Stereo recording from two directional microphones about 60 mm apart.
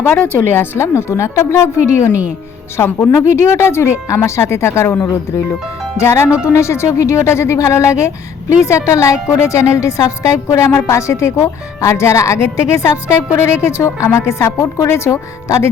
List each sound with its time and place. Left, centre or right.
0.3 s a woman's voice: left
3.2 s a woman's voice: left
6.0 s a woman's voice: left